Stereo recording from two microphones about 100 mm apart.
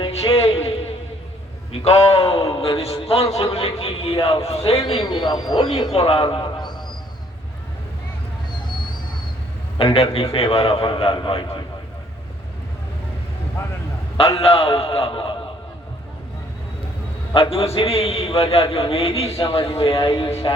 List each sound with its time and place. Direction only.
0.0 s music: 85° left
1.8 s a man's voice: 90° left
4.9 s speech: 50° left (ahead or behind)
5.9 s a man's voice: 75° left (ahead or behind); by 6.7 s 50° left (ahead or behind)
8.6 s music: 50° left (ahead or behind)
9.7 s a man's voice: 75° left (ahead or behind); by 11.4 s 55° left (ahead or behind)
14.3 s a man's voice: 80° left; by 15.4 s 60° left (ahead or behind)
17.3 s a man's voice: 70° left (ahead or behind)